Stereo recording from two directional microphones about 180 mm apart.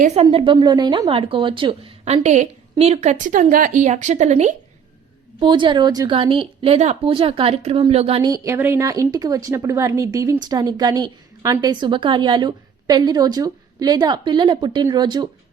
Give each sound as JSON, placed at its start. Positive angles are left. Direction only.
{"t": 0.0, "sound": "a woman's voice", "side_deg": -35}
{"t": 5.4, "sound": "a woman's voice", "side_deg": -25}
{"t": 8.2, "sound": "speech", "side_deg": -15}